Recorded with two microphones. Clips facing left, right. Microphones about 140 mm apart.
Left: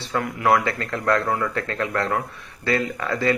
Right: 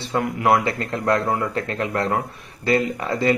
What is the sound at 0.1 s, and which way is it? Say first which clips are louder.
Speech: right 1 dB; 25° right (ahead or behind).